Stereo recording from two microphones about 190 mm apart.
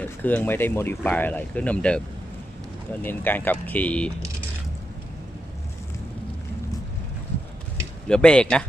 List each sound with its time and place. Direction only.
0.0 s speech: 10° left (ahead or behind)
3.0 s speech: 10° left (ahead or behind)
8.0 s speech: 5° left (ahead or behind)